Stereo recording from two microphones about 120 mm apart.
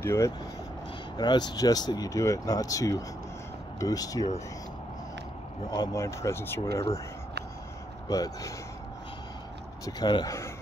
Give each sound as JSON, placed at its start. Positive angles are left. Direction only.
{"t": 0.0, "sound": "speech", "side_deg": 20}
{"t": 1.1, "sound": "speech", "side_deg": 35}
{"t": 5.7, "sound": "speech", "side_deg": 30}
{"t": 8.1, "sound": "speech", "side_deg": 30}
{"t": 9.8, "sound": "speech", "side_deg": 35}